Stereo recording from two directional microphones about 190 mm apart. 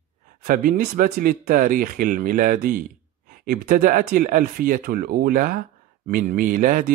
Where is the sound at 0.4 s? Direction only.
45° right (ahead or behind).